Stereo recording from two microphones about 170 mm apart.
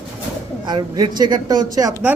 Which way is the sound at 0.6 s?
25° right (ahead or behind).